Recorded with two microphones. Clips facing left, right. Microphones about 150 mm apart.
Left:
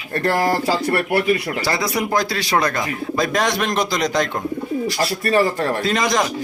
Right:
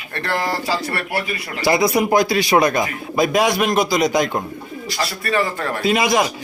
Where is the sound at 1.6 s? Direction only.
15° right (ahead or behind).